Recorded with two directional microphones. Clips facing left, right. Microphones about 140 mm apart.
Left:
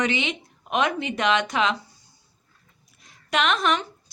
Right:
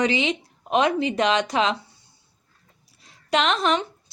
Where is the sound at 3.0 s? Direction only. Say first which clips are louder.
Right 2 dB; 30° right (ahead or behind).